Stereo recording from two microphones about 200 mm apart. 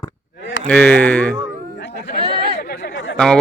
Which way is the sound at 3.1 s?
5° left (ahead or behind).